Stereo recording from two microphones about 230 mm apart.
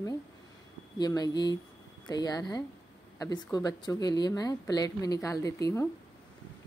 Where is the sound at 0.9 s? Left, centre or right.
Centre.